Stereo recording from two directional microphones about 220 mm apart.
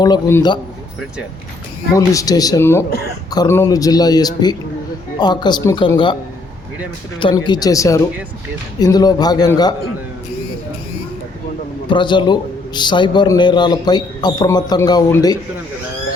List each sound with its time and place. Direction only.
0.0 s a man's voice: 15° left (ahead or behind)
2.0 s a man's voice: 15° left (ahead or behind)
7.2 s a man's voice: 20° left (ahead or behind)
11.9 s a man's voice: 20° left (ahead or behind)